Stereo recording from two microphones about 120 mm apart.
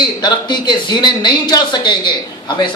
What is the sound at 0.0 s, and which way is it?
A man's voice, 40° left (ahead or behind).